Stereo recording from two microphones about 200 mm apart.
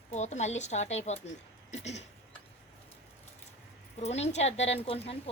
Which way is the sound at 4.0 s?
30° left (ahead or behind).